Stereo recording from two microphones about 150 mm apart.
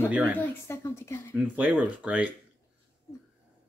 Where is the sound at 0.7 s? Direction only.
15° left (ahead or behind).